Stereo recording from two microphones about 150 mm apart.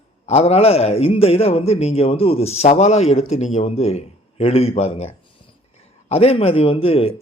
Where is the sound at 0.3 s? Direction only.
45° left (ahead or behind).